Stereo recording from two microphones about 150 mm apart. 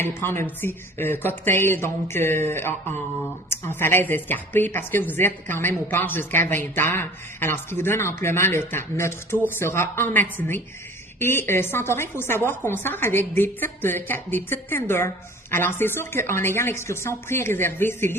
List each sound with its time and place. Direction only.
0.0 s a woman's voice: 15° left (ahead or behind)